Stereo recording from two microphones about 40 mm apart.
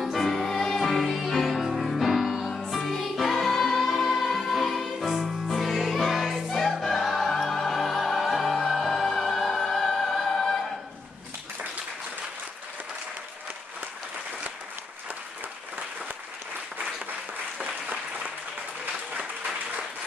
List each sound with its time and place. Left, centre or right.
0.0 s music: centre
17.8 s applause: right